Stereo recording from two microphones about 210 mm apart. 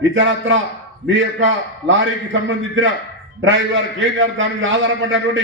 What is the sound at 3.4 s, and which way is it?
A man's voice, 65° right (ahead or behind).